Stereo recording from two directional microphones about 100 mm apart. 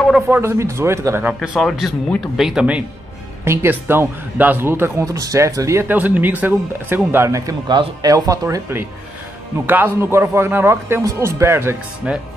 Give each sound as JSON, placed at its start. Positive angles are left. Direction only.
{"t": 0.3, "sound": "a man's voice", "side_deg": -25}
{"t": 1.2, "sound": "speech", "side_deg": -10}
{"t": 1.6, "sound": "speech", "side_deg": 0}
{"t": 3.4, "sound": "a man's voice", "side_deg": -20}
{"t": 5.9, "sound": "a man's voice", "side_deg": -15}
{"t": 7.6, "sound": "speech", "side_deg": -45}
{"t": 9.7, "sound": "a man's voice", "side_deg": -20}
{"t": 12.0, "sound": "speech", "side_deg": -10}